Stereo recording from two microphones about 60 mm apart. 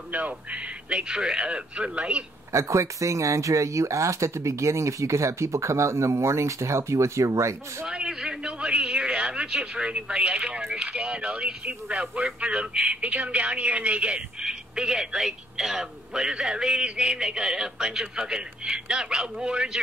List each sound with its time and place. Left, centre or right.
0.1 s speech: right
2.5 s speech: right
7.8 s speech: centre
14.4 s speech: centre